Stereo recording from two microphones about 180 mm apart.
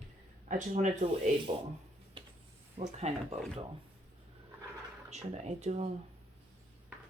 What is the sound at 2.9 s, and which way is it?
Speech, 35° right (ahead or behind).